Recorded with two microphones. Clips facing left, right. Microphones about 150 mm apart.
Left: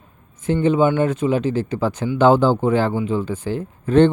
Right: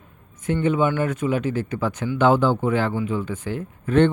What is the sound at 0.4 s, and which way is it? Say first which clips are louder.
A man's voice: left 4 dB; 30° left (ahead or behind).